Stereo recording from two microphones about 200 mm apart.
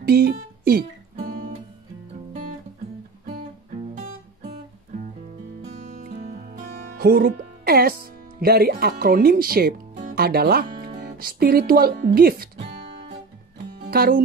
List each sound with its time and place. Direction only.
0.0 s music: 50° right (ahead or behind)
3.9 s music: 35° right (ahead or behind); by 10.9 s 50° right (ahead or behind)
10.9 s speech: 40° right (ahead or behind)
13.8 s speech: 50° right (ahead or behind)